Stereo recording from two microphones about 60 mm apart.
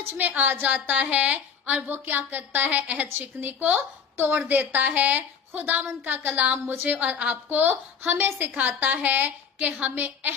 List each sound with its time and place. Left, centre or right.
0.2 s a woman's voice: right